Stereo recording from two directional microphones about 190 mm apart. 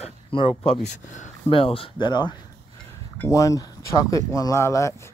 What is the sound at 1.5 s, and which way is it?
Speech, 30° left (ahead or behind).